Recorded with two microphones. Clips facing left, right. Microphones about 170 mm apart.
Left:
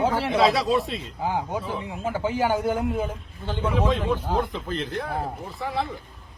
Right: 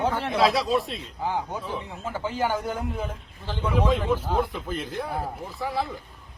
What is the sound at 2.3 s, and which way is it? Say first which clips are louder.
A man's voice: left 3 dB; 10° left (ahead or behind).